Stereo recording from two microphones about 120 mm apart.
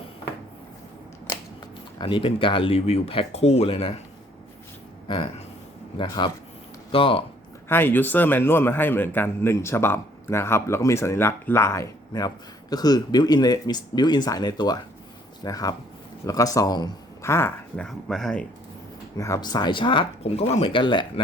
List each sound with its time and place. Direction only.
2.0 s speech: 45° left (ahead or behind)
5.0 s speech: 45° left (ahead or behind)
7.7 s a man's voice: 15° left (ahead or behind)
12.7 s a man's voice: 35° left (ahead or behind)
17.2 s speech: 20° left (ahead or behind)
17.7 s speech: 5° left (ahead or behind)
19.1 s speech: 30° left (ahead or behind)